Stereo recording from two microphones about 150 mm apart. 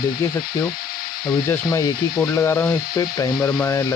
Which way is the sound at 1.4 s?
20° left (ahead or behind).